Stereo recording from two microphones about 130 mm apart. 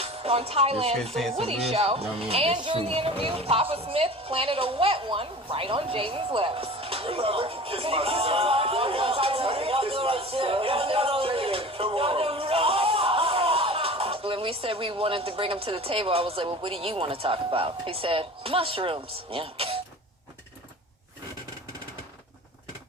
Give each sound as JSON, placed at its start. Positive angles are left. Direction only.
{"t": 0.0, "sound": "speech", "side_deg": -50}